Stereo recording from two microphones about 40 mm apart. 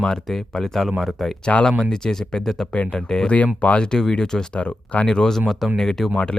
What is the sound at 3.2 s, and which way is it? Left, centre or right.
Speech, left.